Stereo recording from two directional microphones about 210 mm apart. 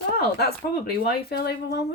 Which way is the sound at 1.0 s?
50° left (ahead or behind).